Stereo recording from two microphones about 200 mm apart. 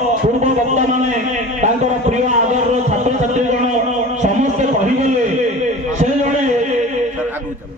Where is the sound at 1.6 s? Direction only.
35° right (ahead or behind).